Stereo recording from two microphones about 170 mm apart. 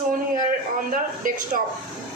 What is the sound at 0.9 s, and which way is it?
Speech, 55° right (ahead or behind).